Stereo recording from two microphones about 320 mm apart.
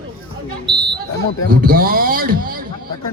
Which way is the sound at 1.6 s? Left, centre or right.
Right.